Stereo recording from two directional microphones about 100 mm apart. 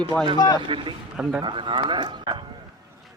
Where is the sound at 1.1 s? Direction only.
10° right (ahead or behind).